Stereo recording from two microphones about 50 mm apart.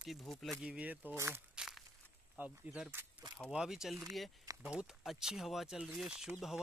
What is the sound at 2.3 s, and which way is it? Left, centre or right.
Speech, right.